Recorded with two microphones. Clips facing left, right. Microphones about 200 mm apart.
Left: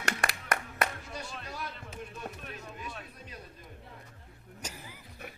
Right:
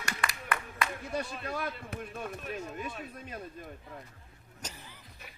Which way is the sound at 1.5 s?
55° right (ahead or behind).